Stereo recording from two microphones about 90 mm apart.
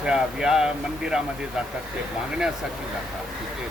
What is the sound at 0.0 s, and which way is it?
Speech, 5° right (ahead or behind).